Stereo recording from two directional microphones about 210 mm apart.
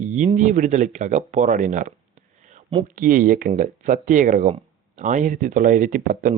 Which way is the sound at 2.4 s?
35° right (ahead or behind).